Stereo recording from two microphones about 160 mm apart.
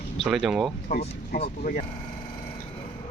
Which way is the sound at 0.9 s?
75° left (ahead or behind).